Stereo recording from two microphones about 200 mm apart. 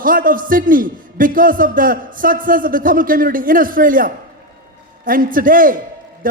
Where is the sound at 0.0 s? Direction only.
45° right (ahead or behind).